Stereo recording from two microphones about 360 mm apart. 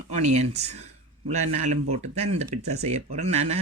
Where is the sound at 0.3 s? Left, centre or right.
Centre.